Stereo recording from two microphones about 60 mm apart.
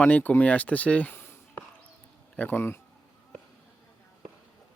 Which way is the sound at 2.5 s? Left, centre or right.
Left.